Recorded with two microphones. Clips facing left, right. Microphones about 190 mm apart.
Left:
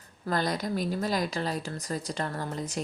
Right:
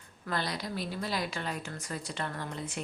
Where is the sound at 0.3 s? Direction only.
45° left (ahead or behind).